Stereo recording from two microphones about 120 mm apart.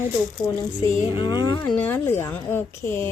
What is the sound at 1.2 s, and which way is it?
Speech, 35° left (ahead or behind).